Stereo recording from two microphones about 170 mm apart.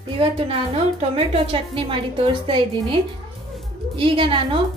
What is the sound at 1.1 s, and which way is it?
A woman's voice, 35° right (ahead or behind).